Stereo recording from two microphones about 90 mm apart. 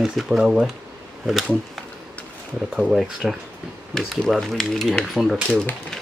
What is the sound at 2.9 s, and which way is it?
Speech, centre (ahead or behind).